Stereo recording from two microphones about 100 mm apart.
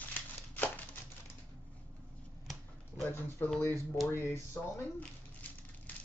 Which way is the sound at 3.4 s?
20° left (ahead or behind).